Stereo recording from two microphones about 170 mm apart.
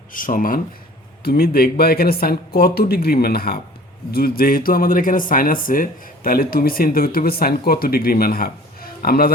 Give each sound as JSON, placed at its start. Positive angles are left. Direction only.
{"t": 0.1, "sound": "speech", "side_deg": 50}